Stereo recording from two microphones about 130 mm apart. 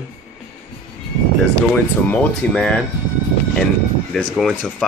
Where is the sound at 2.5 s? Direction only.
5° left (ahead or behind).